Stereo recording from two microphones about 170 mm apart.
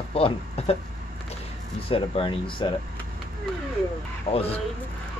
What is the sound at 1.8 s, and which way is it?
Speech, 30° left (ahead or behind).